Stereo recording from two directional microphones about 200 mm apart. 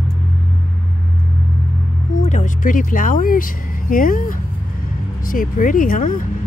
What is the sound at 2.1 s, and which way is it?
Speech, 40° left (ahead or behind).